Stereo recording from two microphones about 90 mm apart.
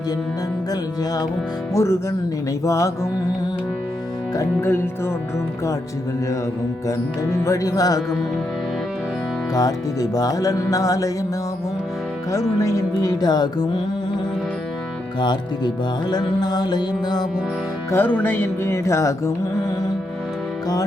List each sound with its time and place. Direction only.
0.7 s music: 45° left (ahead or behind)
1.7 s music: 35° left (ahead or behind)
4.6 s speech: 25° left (ahead or behind)
7.4 s music: 40° left (ahead or behind)
9.6 s music: 40° left (ahead or behind)
12.3 s music: 35° left (ahead or behind)
15.2 s music: 55° left (ahead or behind)
17.9 s speech: 20° left (ahead or behind)